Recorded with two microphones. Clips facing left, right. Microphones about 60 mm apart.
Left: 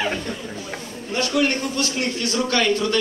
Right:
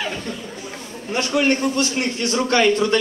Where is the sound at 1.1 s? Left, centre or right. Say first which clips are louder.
Right 2 dB; right.